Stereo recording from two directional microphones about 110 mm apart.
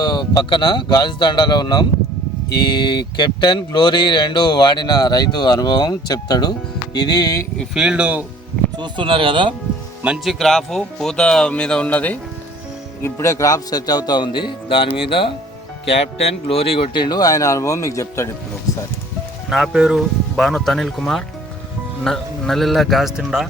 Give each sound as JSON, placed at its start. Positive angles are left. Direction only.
{"t": 0.0, "sound": "speech", "side_deg": 40}
{"t": 7.7, "sound": "speech", "side_deg": -5}
{"t": 8.8, "sound": "speech", "side_deg": -50}
{"t": 10.2, "sound": "speech", "side_deg": 0}
{"t": 13.0, "sound": "speech", "side_deg": 25}
{"t": 19.5, "sound": "speech", "side_deg": -5}